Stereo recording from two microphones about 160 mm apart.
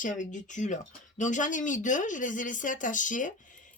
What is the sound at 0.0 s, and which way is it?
Speech, 50° left (ahead or behind).